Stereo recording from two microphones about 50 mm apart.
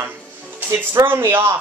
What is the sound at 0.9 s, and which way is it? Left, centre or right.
Speech, right.